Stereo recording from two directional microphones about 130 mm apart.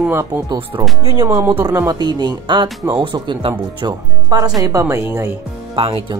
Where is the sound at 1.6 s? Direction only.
30° right (ahead or behind).